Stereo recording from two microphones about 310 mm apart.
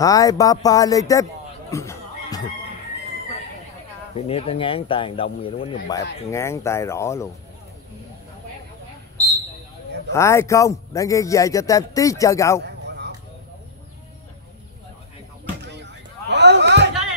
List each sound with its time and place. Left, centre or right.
0.0 s speech: centre
1.7 s music: centre
4.1 s speech: centre
10.1 s speech: centre
12.6 s bow-wow: right
15.7 s a sound: right